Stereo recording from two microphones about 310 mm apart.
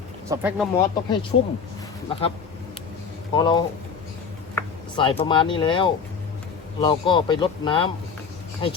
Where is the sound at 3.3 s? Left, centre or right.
Centre.